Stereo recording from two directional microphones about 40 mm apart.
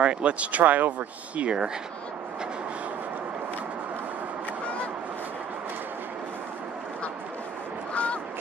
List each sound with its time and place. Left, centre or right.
0.0 s speech: right
7.9 s honk: left